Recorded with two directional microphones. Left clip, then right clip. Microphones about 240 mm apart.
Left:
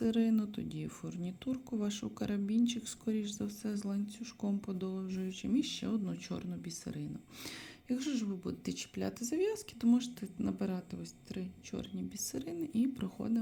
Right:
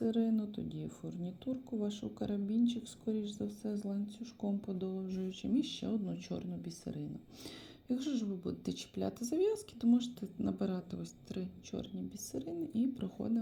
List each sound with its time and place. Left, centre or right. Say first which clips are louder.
0.0 s speech: left 2 dB; centre